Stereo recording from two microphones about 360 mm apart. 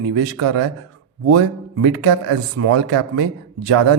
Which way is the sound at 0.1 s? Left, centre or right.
Right.